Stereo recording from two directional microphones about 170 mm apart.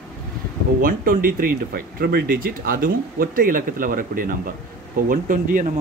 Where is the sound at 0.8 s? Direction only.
55° right (ahead or behind).